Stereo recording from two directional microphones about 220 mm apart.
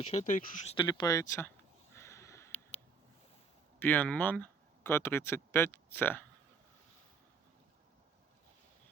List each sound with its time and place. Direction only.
0.0 s speech: 30° left (ahead or behind)
0.8 s a sound: 20° left (ahead or behind)
3.8 s speech: 10° left (ahead or behind)